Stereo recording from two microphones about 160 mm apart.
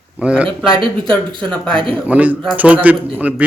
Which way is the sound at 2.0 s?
10° right (ahead or behind).